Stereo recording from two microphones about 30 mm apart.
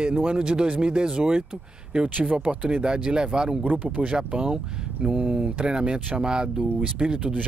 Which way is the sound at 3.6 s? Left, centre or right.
Right.